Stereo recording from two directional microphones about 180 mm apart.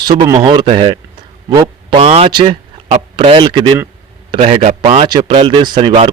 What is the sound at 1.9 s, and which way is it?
A man's voice, 35° right (ahead or behind).